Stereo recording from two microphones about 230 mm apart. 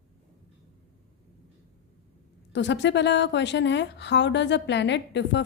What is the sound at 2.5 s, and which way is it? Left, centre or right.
Speech, left.